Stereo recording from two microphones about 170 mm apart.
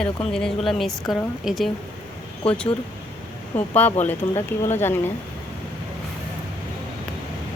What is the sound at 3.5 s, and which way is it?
Speech, 10° left (ahead or behind).